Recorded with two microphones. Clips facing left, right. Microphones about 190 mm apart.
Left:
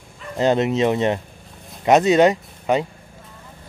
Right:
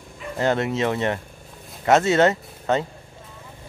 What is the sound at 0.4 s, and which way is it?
Speech, 20° left (ahead or behind).